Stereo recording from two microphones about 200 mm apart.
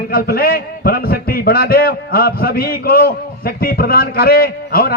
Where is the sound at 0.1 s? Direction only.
50° left (ahead or behind).